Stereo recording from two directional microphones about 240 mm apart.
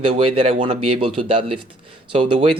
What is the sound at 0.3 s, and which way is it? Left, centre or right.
Speech, right.